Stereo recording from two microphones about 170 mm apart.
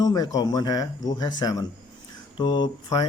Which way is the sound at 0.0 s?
20° left (ahead or behind).